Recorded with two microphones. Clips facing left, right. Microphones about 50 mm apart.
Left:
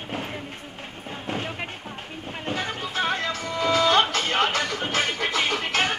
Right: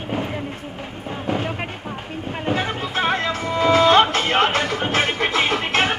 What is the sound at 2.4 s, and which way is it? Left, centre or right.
Music, right.